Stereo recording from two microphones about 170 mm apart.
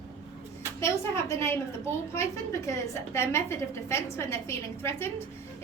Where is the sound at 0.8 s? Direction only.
15° left (ahead or behind).